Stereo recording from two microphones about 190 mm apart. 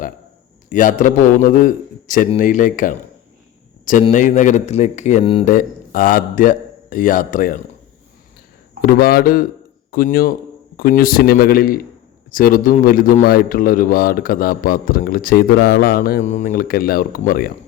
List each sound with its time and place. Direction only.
0.7 s a man's voice: 45° left (ahead or behind)
4.1 s speech: 40° left (ahead or behind)
5.5 s a man's voice: 45° left (ahead or behind)
8.8 s a man's voice: 50° left (ahead or behind)